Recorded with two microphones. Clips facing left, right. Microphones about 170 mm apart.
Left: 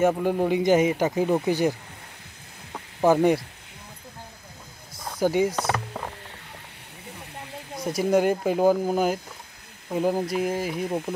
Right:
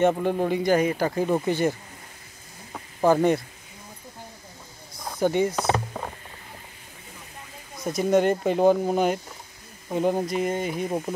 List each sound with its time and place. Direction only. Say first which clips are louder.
0.0 s speech: even; 5° left (ahead or behind)
2.7 s snake: even; 5° left (ahead or behind)
5.2 s speech: even; 10° left (ahead or behind)
5.6 s rowboat: right 2 dB; 10° right (ahead or behind)
7.3 s snake: left 7 dB; 70° left (ahead or behind)
7.8 s speech: even; 10° left (ahead or behind)